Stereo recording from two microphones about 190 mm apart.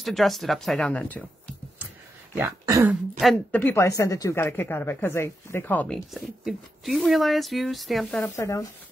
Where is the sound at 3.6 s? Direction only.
15° left (ahead or behind).